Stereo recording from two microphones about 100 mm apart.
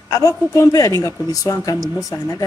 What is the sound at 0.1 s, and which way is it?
Speech, 35° left (ahead or behind).